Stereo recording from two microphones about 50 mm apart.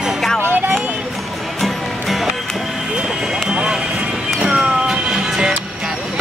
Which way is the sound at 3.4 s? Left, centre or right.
Centre.